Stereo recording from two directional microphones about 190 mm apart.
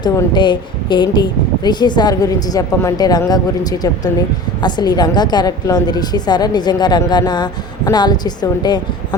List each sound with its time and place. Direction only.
0.0 s a woman's voice: 25° left (ahead or behind)